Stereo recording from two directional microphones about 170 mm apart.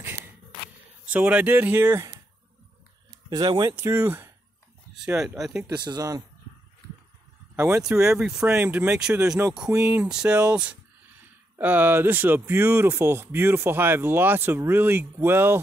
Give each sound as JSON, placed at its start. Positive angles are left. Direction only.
{"t": 1.1, "sound": "speech", "side_deg": -10}
{"t": 3.3, "sound": "speech", "side_deg": -25}
{"t": 5.7, "sound": "speech", "side_deg": -20}
{"t": 7.5, "sound": "speech", "side_deg": -15}